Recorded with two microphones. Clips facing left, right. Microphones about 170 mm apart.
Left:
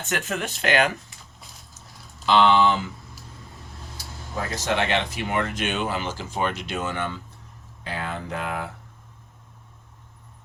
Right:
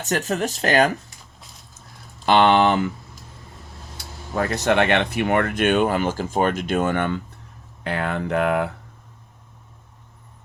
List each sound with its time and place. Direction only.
0.0 s speech: 40° right (ahead or behind)
2.2 s speech: 55° right (ahead or behind)
3.9 s speech: 65° right (ahead or behind)